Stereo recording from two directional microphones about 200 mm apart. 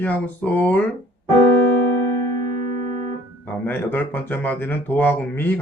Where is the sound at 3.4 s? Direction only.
10° left (ahead or behind).